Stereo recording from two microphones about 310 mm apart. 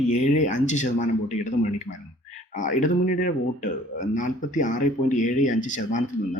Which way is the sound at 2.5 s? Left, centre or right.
Left.